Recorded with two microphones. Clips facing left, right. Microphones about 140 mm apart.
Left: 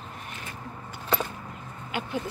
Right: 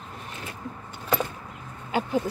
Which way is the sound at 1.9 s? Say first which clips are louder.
Right 6 dB; 40° right (ahead or behind).